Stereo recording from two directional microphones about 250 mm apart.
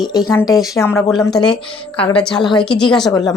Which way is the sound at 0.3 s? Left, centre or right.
Centre.